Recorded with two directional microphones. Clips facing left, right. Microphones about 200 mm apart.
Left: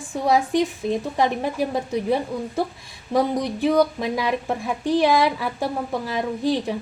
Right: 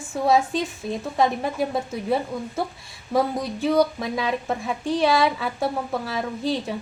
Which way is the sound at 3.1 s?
15° left (ahead or behind).